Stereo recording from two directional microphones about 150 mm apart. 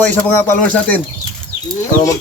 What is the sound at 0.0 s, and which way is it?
A man's voice, 10° left (ahead or behind).